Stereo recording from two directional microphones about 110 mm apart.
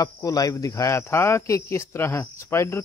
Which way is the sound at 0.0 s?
35° left (ahead or behind).